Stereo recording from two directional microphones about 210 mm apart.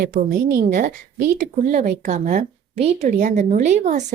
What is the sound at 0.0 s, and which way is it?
A woman's voice, 45° right (ahead or behind).